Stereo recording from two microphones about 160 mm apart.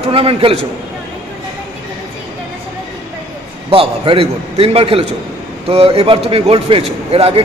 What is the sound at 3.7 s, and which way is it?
A man's voice, 35° right (ahead or behind).